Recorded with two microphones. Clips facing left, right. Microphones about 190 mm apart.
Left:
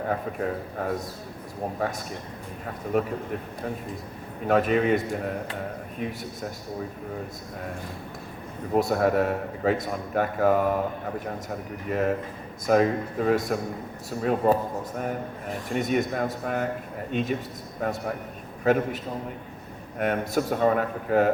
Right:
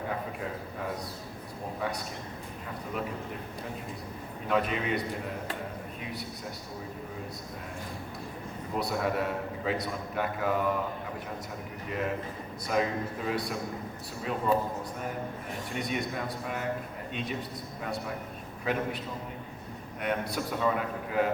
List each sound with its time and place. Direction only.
0.8 s a man's voice: 50° left (ahead or behind)
2.9 s a man's voice: 45° left (ahead or behind)
4.4 s a man's voice: 45° left (ahead or behind)
8.7 s a man's voice: 45° left (ahead or behind)
11.9 s a man's voice: 50° left (ahead or behind)
20.0 s a man's voice: 45° left (ahead or behind)